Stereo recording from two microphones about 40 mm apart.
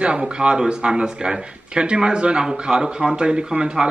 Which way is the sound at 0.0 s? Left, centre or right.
Right.